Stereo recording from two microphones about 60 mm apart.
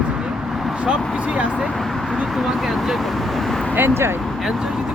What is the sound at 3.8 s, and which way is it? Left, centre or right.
Speech, right.